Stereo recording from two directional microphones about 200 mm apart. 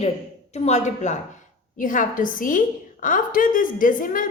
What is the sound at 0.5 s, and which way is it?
A woman's voice, 35° left (ahead or behind).